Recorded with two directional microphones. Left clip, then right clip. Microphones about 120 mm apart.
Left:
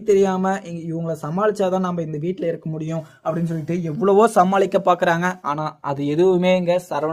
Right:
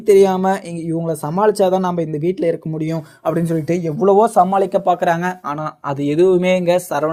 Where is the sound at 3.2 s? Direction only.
75° right (ahead or behind).